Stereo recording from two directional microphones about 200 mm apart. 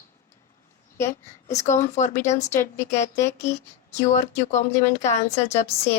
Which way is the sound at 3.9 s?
35° left (ahead or behind).